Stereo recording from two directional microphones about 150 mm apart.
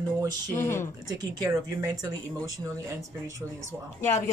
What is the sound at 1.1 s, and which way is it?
Speech, 25° right (ahead or behind).